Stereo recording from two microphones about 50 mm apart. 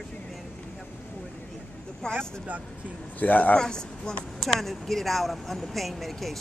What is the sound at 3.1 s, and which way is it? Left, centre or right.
Speech, left.